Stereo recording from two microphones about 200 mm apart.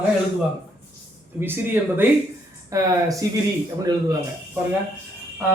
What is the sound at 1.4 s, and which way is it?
A man's voice, 10° right (ahead or behind).